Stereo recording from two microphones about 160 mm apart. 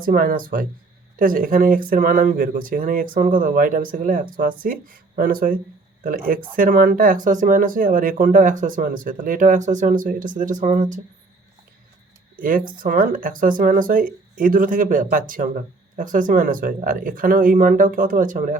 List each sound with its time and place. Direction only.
0.0 s speech: 60° right (ahead or behind)
12.4 s speech: 60° right (ahead or behind)